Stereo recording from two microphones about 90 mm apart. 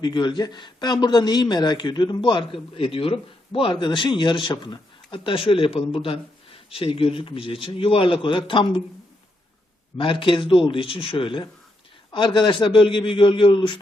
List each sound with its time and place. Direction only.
0.0 s a man's voice: 55° left (ahead or behind); by 8.8 s 70° left (ahead or behind)
10.0 s a man's voice: 75° left (ahead or behind)
12.1 s a man's voice: 60° left (ahead or behind)